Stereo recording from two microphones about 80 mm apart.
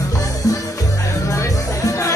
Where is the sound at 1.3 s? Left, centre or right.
Left.